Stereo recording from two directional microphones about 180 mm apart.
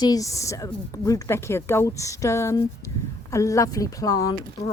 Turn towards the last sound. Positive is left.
turn(degrees=20)  # may be behind; listen again after turning